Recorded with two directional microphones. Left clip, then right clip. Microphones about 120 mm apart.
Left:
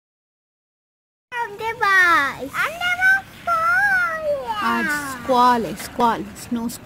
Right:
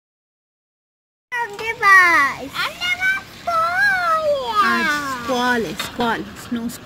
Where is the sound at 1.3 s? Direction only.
30° left (ahead or behind).